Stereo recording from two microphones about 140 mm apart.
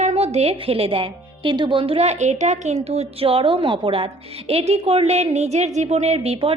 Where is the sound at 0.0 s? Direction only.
50° right (ahead or behind).